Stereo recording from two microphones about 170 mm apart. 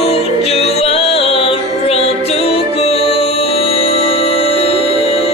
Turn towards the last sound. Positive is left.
turn(degrees=35)  # may be behind; listen again after turning